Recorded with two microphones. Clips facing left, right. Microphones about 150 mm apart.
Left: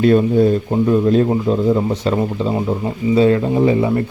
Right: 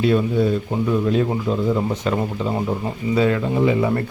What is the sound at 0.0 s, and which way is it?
Speech, 45° left (ahead or behind).